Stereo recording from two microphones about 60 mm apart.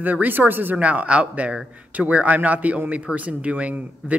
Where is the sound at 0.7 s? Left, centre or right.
Right.